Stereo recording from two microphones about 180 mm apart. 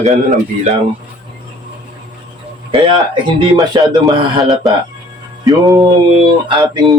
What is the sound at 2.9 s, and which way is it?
A man's voice, 25° right (ahead or behind).